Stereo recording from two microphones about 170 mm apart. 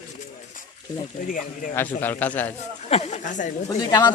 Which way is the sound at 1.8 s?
10° left (ahead or behind).